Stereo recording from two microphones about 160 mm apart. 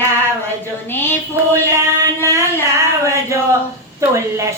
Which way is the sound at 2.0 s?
20° right (ahead or behind).